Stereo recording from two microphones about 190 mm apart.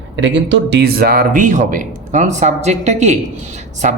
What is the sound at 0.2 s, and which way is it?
A man's voice, 70° right (ahead or behind).